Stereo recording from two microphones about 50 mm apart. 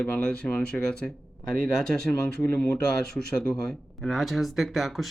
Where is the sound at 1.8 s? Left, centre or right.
Centre.